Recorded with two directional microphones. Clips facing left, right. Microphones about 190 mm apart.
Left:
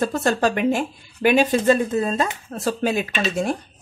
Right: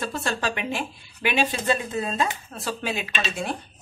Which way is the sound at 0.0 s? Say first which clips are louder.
Left 8 dB; 45° left (ahead or behind).